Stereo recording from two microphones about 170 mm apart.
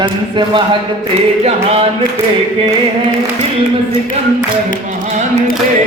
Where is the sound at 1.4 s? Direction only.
35° right (ahead or behind).